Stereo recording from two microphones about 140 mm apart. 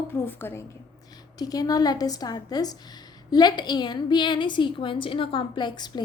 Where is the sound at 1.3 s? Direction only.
25° left (ahead or behind).